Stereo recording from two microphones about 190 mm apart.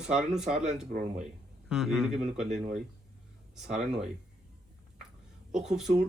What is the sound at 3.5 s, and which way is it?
Speech, 5° right (ahead or behind).